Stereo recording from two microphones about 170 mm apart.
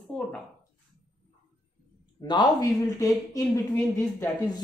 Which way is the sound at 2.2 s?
25° left (ahead or behind).